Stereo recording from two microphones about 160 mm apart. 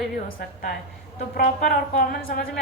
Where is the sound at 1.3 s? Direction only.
65° left (ahead or behind).